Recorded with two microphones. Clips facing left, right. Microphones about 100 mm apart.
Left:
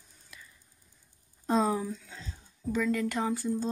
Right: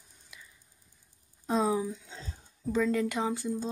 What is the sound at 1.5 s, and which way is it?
Speech, 5° right (ahead or behind).